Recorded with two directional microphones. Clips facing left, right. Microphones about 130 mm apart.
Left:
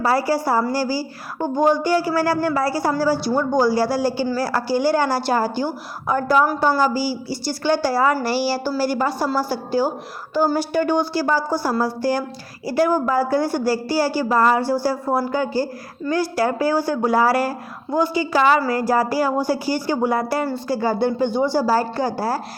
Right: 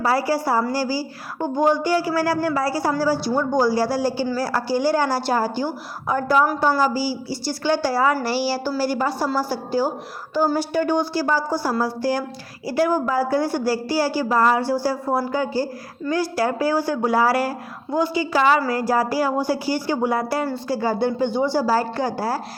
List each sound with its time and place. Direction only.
0.0 s a woman's voice: 45° left (ahead or behind)
3.5 s a woman's voice: 65° left (ahead or behind)
12.0 s speech: 45° left (ahead or behind)